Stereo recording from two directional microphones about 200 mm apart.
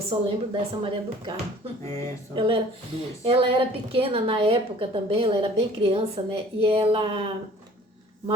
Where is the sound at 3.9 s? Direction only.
30° right (ahead or behind).